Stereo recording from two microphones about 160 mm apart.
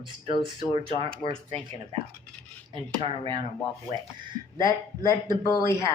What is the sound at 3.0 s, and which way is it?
Speech, 35° right (ahead or behind).